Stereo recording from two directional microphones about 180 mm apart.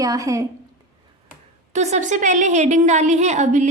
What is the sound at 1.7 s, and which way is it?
A woman's voice, 40° right (ahead or behind).